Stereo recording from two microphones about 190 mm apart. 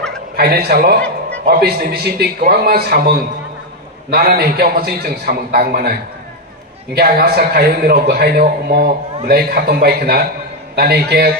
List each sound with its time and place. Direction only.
0.4 s a man's voice: 55° right (ahead or behind)
7.0 s a man's voice: 55° right (ahead or behind)